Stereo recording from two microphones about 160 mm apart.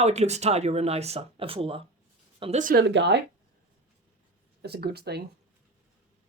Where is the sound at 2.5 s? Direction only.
65° right (ahead or behind); by 3.2 s 90° right.